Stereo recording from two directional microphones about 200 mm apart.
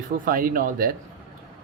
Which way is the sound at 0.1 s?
45° right (ahead or behind).